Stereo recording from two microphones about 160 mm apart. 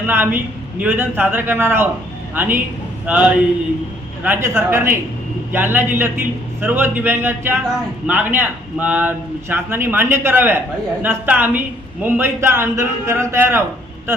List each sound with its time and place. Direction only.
0.1 s a man's voice: 15° right (ahead or behind)